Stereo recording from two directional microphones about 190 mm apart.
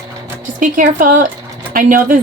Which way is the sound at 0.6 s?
45° right (ahead or behind).